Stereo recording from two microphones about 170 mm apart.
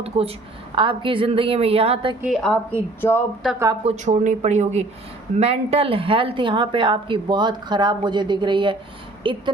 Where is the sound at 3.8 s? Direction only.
40° right (ahead or behind).